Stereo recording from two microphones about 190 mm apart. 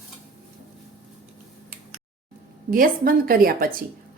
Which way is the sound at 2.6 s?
50° right (ahead or behind).